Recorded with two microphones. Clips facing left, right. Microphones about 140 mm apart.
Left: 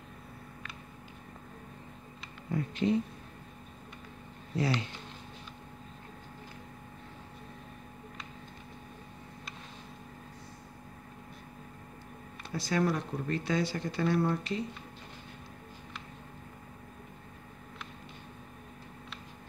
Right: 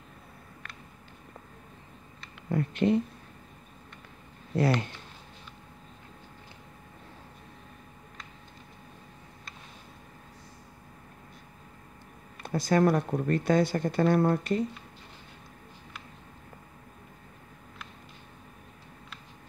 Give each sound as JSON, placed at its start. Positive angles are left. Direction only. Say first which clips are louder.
{"t": 2.5, "sound": "speech", "louder": "right 4 dB", "side_deg": -60}
{"t": 4.6, "sound": "speech", "louder": "right 5 dB", "side_deg": -55}
{"t": 12.4, "sound": "speech", "louder": "right 6 dB", "side_deg": -50}